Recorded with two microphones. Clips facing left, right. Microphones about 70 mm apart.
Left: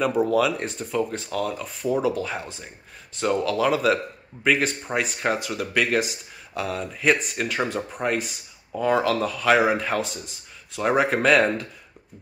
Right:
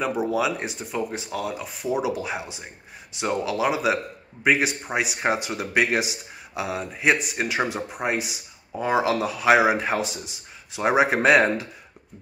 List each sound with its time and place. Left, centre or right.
0.0 s speech: centre
5.2 s speech: right